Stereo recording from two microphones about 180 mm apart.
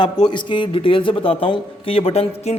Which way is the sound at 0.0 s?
25° left (ahead or behind).